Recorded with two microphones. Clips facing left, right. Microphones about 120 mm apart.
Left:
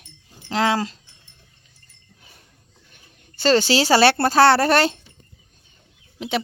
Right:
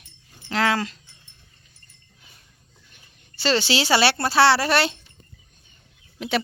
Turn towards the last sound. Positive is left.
turn(degrees=20)  # may be behind; listen again after turning